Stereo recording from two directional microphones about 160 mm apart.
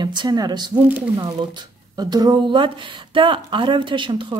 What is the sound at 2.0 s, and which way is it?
Speech, 25° right (ahead or behind).